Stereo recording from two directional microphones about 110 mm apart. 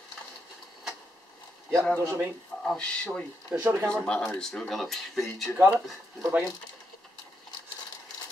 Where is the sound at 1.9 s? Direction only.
20° right (ahead or behind).